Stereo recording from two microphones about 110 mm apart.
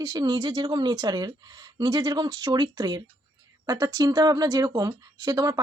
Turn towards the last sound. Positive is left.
turn(degrees=-35)  # may be behind; listen again after turning